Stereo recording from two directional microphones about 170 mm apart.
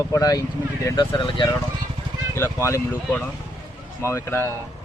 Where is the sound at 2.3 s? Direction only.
15° left (ahead or behind).